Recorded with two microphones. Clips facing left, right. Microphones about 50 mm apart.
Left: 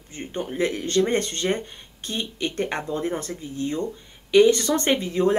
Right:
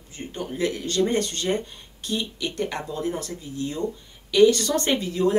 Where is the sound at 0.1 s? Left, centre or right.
Left.